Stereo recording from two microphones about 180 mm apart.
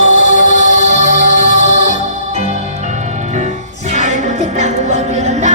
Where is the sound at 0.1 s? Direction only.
45° left (ahead or behind).